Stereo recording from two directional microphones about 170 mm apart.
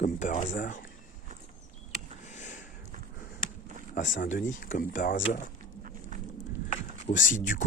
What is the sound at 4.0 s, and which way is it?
Speech, 50° left (ahead or behind).